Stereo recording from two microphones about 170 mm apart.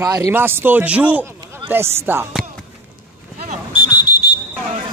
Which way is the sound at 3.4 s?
50° right (ahead or behind).